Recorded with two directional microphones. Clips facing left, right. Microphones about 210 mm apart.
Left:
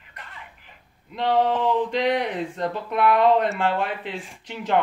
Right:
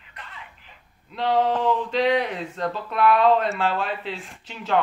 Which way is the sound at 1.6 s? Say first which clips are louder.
Even; 15° left (ahead or behind).